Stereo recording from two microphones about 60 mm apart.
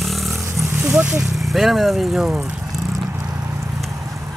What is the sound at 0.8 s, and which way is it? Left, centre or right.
Vehicle, centre.